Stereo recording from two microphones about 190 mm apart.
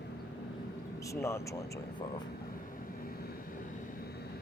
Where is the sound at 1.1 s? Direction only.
15° left (ahead or behind).